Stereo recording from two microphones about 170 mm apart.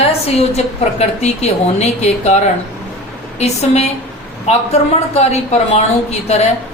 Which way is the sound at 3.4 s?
40° left (ahead or behind).